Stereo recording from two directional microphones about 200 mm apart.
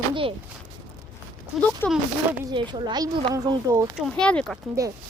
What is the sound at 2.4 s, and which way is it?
A child's voice, 20° right (ahead or behind).